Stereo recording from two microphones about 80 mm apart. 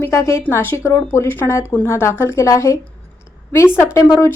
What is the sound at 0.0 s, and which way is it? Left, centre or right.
A woman's voice, left.